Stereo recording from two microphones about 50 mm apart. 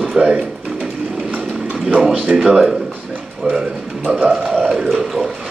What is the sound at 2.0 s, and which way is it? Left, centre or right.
Speech, right.